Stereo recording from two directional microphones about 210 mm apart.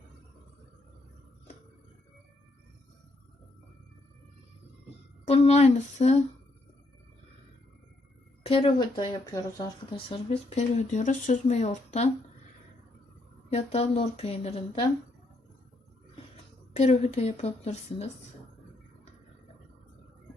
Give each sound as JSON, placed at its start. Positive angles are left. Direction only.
{"t": 5.2, "sound": "speech", "side_deg": 30}
{"t": 8.4, "sound": "speech", "side_deg": 25}
{"t": 13.5, "sound": "a woman's voice", "side_deg": 30}
{"t": 16.7, "sound": "speech", "side_deg": 30}